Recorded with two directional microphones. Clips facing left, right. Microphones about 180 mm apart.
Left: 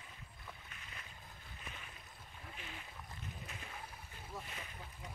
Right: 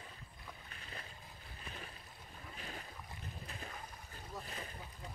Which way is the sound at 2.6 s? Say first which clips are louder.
Right 4 dB; 40° right (ahead or behind).